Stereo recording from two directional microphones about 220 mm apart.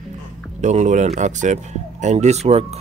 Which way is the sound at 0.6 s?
30° right (ahead or behind).